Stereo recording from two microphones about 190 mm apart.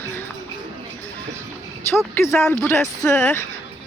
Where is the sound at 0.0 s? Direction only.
10° left (ahead or behind).